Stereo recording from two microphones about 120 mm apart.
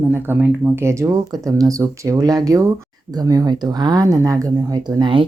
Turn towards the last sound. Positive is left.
turn(degrees=-40)  # may be behind; listen again after turning